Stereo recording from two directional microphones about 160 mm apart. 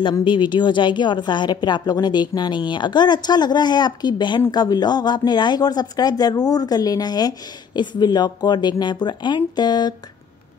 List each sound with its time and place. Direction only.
0.0 s speech: 30° left (ahead or behind)